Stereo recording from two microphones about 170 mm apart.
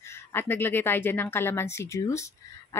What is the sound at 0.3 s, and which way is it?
Speech, 10° left (ahead or behind).